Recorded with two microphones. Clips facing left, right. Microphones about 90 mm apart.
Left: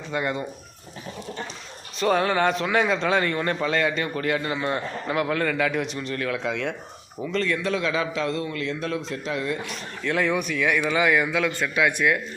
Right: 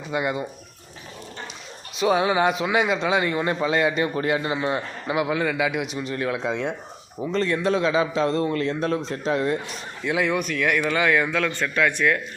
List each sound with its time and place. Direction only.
0.1 s a man's voice: 10° right (ahead or behind)
2.0 s a man's voice: 10° right (ahead or behind); by 9.7 s 35° right (ahead or behind)
10.0 s speech: 5° right (ahead or behind); by 12.2 s 10° left (ahead or behind)